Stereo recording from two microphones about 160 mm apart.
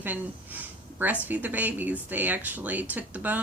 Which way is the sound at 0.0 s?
10° right (ahead or behind).